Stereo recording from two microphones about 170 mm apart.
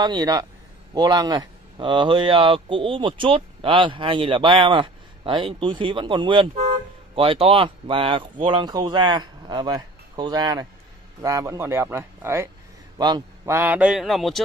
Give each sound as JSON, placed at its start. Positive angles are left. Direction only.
{"t": 0.0, "sound": "a man's voice", "side_deg": -25}
{"t": 13.6, "sound": "speech", "side_deg": -10}